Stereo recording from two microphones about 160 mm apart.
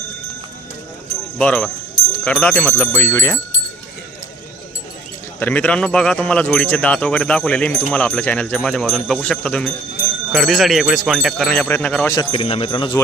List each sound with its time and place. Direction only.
1.4 s speech: 5° left (ahead or behind)
5.4 s speech: 10° left (ahead or behind)
12.3 s speech: 35° left (ahead or behind)